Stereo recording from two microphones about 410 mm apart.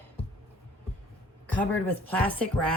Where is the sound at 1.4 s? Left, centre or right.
Centre.